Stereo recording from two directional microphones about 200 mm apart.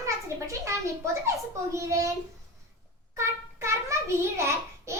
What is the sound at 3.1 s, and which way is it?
A child's voice, 15° right (ahead or behind).